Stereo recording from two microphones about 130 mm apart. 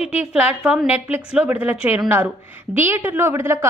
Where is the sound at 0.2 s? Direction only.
5° right (ahead or behind).